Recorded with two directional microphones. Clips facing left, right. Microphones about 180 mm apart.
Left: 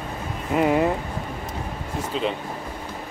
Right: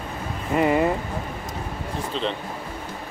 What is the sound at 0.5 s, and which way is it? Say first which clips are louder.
Speech: even; centre (ahead or behind).